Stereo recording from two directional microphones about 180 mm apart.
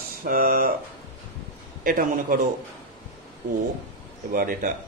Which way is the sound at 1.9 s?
50° right (ahead or behind).